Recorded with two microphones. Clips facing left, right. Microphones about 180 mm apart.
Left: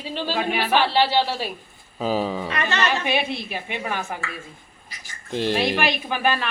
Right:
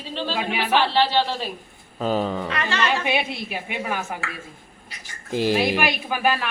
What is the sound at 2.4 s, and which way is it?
Speech, 20° left (ahead or behind).